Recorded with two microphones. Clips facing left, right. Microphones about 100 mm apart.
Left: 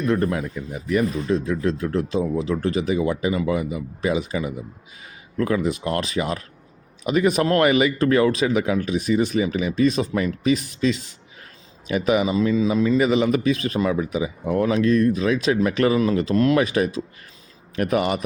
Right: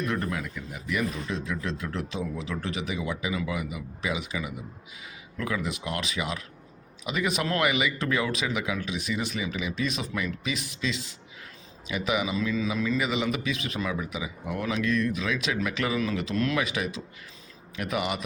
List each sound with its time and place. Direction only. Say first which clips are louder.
0.1 s a man's voice: left 8 dB; 35° left (ahead or behind)
12.5 s speech: left 9 dB; 30° left (ahead or behind)
16.0 s a man's voice: left 9 dB; 35° left (ahead or behind)